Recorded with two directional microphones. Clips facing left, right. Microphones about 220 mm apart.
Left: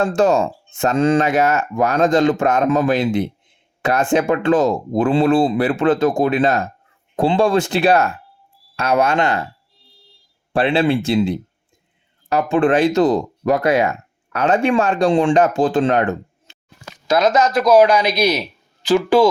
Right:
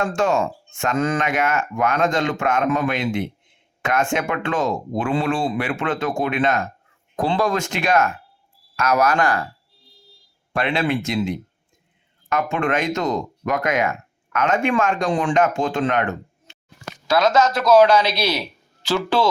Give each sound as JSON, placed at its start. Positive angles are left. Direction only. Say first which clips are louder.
{"t": 0.0, "sound": "speech", "louder": "left 5 dB", "side_deg": 35}
{"t": 10.5, "sound": "speech", "louder": "left 5 dB", "side_deg": 30}
{"t": 17.1, "sound": "a man's voice", "louder": "left 2 dB", "side_deg": 20}